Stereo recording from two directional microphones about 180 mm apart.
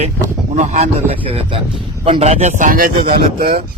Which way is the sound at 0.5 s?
40° right (ahead or behind).